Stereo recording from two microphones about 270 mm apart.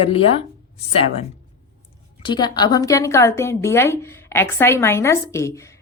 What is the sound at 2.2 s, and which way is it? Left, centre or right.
A woman's voice, centre.